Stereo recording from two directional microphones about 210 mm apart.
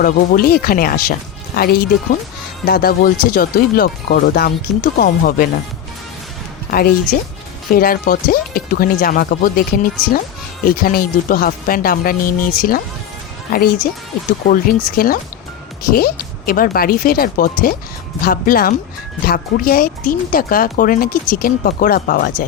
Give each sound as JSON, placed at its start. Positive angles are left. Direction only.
{"t": 0.0, "sound": "speech", "side_deg": 45}
{"t": 6.7, "sound": "speech", "side_deg": 45}